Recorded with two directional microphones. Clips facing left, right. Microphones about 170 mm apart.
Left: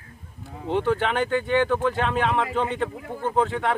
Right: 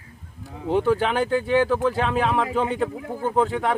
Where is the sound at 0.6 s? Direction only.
10° right (ahead or behind).